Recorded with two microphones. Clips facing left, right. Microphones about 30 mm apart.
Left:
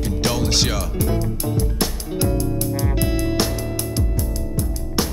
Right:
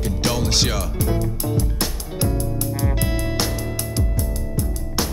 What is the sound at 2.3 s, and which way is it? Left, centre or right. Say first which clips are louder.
Music: left 3 dB; left.